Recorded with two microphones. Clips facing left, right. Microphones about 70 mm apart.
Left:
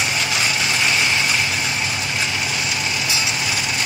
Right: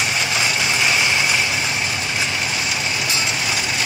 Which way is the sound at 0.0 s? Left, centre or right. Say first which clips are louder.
Right 1 dB; centre.